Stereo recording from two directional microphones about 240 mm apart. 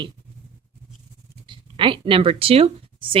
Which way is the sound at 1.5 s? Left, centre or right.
Right.